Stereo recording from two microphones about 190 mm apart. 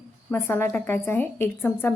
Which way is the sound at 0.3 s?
10° left (ahead or behind).